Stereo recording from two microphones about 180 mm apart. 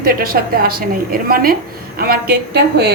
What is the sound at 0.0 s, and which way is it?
A woman's voice, 55° right (ahead or behind).